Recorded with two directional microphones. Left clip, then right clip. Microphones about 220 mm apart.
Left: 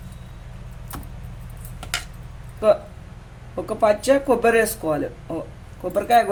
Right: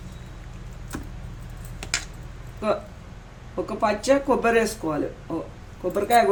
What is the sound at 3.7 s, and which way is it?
Speech, 30° left (ahead or behind).